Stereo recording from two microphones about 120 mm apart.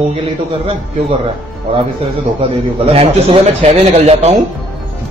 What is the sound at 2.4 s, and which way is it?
A man's voice, 55° right (ahead or behind).